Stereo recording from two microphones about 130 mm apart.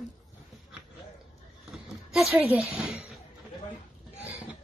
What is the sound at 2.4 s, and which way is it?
Speech, 10° right (ahead or behind).